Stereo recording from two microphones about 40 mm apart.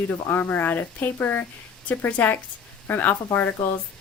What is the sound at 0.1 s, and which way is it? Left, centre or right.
Speech, left.